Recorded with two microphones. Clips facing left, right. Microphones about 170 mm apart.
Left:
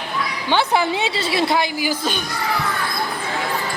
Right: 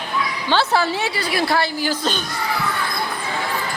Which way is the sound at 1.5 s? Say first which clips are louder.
Even; 15° left (ahead or behind).